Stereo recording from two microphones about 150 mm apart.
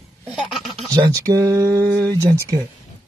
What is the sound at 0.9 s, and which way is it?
Speech, 25° right (ahead or behind).